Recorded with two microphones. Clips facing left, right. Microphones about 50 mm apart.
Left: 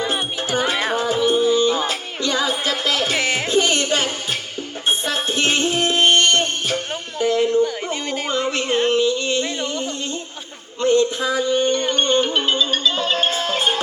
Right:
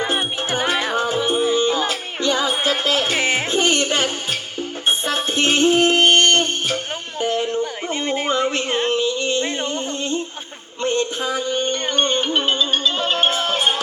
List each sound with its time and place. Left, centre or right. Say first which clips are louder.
0.0 s music: right 1 dB; right
7.2 s a sound: left 4 dB; right
7.9 s music: right 3 dB; right